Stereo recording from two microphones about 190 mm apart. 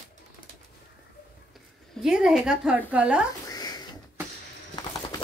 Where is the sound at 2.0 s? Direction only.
5° right (ahead or behind).